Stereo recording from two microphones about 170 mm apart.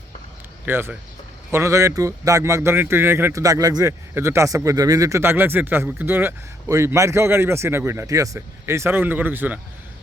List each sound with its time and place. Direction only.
0.6 s a man's voice: 10° right (ahead or behind)